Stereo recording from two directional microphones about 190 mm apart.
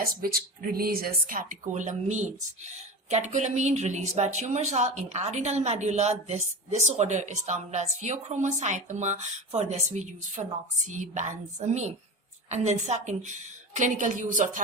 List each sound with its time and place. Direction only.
0.0 s speech: 50° right (ahead or behind)